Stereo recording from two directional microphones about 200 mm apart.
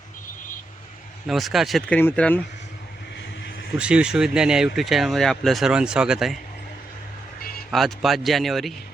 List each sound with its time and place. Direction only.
1.3 s speech: centre (ahead or behind)
3.2 s vehicle: 60° left (ahead or behind)
3.7 s speech: 5° right (ahead or behind)
7.7 s speech: centre (ahead or behind)